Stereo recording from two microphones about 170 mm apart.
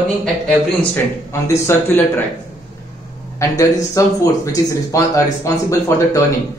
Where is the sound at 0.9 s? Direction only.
15° left (ahead or behind).